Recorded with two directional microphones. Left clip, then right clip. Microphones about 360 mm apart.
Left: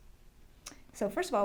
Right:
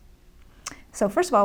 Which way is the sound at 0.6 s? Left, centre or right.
Right.